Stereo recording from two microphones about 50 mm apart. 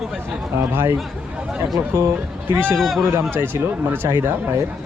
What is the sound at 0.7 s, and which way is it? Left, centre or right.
Speech, right.